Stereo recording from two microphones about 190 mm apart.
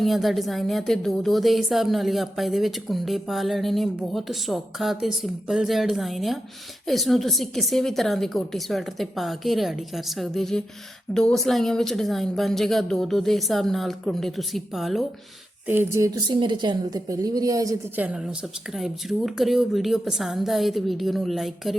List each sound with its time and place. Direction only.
0.0 s a woman's voice: centre (ahead or behind)
15.6 s a woman's voice: 10° right (ahead or behind)
18.0 s a woman's voice: 5° right (ahead or behind)